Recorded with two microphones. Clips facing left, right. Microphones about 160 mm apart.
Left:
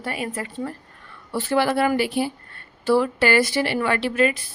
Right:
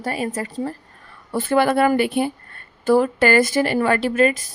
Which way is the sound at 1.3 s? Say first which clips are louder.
Right 3 dB; 50° right (ahead or behind).